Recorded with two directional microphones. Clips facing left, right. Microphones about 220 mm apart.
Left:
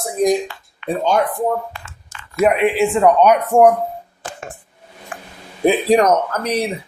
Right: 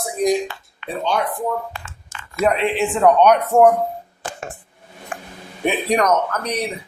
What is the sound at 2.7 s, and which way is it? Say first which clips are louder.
Speech: left 2 dB; centre (ahead or behind).